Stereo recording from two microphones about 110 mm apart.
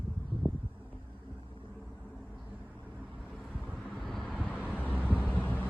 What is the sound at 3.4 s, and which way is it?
Vehicle, 5° left (ahead or behind).